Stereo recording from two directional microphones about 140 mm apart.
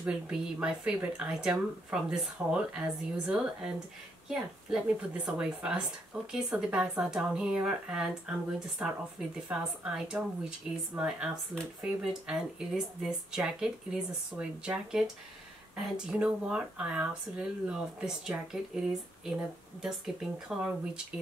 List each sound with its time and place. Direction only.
0.0 s speech: 5° right (ahead or behind)